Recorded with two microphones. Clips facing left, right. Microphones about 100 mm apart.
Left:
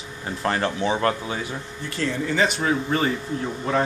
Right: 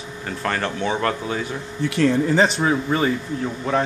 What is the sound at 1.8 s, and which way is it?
Speech, 70° right (ahead or behind).